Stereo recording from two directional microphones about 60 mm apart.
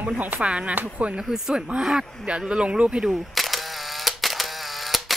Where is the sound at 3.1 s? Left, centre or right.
Centre.